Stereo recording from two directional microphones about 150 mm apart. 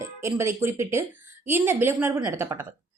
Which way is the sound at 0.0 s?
20° right (ahead or behind).